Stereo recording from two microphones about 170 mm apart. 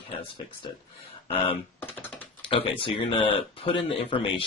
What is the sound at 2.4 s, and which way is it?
Speech, 30° left (ahead or behind).